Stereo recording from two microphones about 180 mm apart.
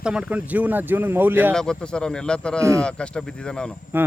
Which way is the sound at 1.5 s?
5° left (ahead or behind).